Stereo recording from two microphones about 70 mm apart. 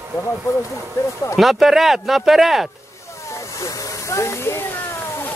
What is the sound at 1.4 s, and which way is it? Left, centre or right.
Speech, centre.